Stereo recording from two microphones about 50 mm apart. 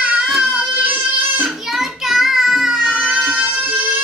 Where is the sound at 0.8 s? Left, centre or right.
Right.